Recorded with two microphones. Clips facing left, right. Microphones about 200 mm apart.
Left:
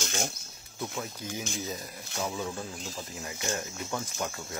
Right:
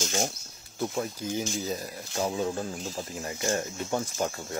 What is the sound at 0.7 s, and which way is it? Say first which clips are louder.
Speech: right 6 dB; 30° right (ahead or behind).